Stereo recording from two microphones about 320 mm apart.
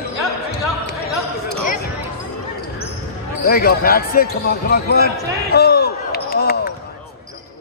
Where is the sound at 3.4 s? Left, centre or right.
Left.